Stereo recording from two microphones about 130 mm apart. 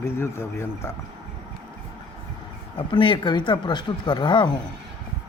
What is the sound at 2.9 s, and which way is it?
Speech, 40° left (ahead or behind).